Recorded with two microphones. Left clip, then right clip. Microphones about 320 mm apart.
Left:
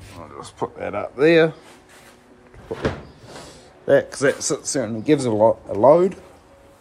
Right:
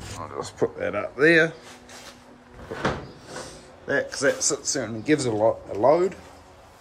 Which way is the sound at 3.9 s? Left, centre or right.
Centre.